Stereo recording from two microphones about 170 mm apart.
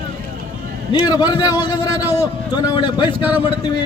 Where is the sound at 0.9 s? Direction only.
25° left (ahead or behind).